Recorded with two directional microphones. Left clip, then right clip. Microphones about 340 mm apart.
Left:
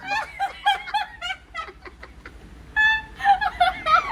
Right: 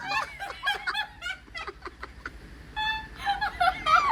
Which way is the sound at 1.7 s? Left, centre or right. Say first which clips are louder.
Right 2 dB; centre.